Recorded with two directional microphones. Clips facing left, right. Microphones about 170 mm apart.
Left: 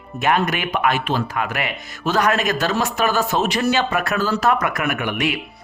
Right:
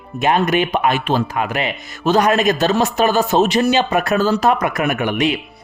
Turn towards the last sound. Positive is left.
turn(degrees=-25)  # may be behind; listen again after turning